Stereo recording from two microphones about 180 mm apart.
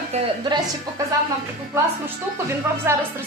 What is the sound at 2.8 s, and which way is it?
Speech, 15° right (ahead or behind).